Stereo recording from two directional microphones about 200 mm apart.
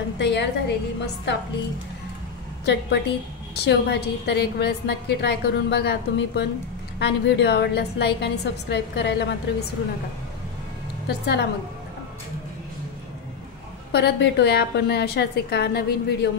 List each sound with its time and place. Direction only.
0.2 s a woman's voice: 60° left (ahead or behind)
2.6 s a woman's voice: 60° left (ahead or behind)
11.1 s a woman's voice: 55° left (ahead or behind)
13.9 s a woman's voice: 55° left (ahead or behind)